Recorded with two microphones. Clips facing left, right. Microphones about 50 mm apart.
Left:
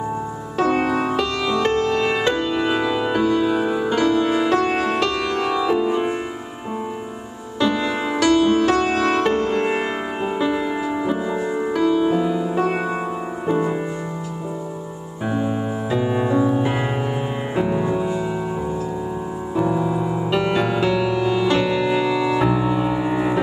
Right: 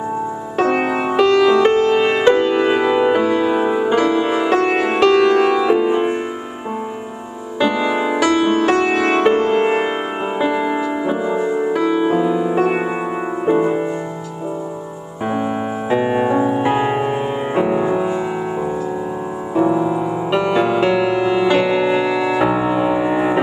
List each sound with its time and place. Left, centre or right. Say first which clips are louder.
0.6 s music: right 2 dB; right
7.6 s music: right 3 dB; right
8.3 s music: left 1 dB; right; by 11.8 s centre
11.8 s music: even; right
15.2 s music: right 2 dB; right
19.5 s music: right 5 dB; centre